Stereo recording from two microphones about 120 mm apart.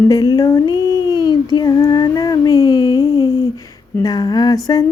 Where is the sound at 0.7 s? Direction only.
25° right (ahead or behind).